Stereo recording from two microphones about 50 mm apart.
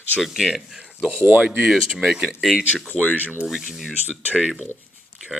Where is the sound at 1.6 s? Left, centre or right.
Centre.